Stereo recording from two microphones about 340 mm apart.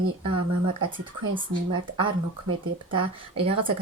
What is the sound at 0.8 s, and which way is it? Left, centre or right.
A woman's voice, centre.